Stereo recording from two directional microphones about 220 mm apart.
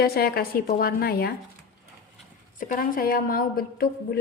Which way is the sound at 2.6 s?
40° left (ahead or behind).